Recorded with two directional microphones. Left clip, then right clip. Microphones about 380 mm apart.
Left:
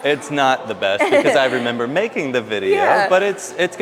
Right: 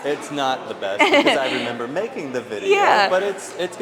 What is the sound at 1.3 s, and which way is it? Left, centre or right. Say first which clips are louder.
A man's voice: left 6 dB; left.